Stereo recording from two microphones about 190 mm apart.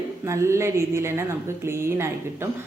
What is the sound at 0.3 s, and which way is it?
A woman's voice, 15° right (ahead or behind).